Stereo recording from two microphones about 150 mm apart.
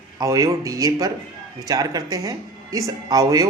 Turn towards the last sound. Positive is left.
turn(degrees=-25)  # may be behind; listen again after turning